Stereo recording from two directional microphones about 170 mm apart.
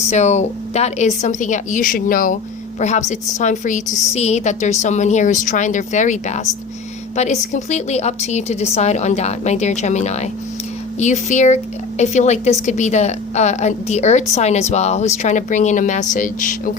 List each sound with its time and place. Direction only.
0.1 s a woman's voice: 40° left (ahead or behind)
3.1 s a woman's voice: 45° left (ahead or behind)